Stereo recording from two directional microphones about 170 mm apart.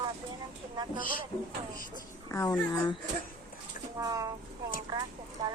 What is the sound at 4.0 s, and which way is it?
Speech, 20° right (ahead or behind).